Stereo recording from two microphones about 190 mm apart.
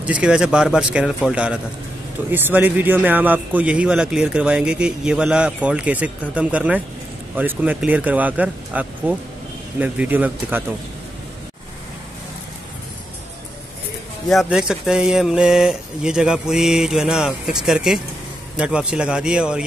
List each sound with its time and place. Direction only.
0.0 s a man's voice: 5° right (ahead or behind)
14.3 s speech: centre (ahead or behind)